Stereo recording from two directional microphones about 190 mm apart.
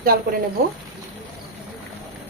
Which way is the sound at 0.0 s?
50° right (ahead or behind).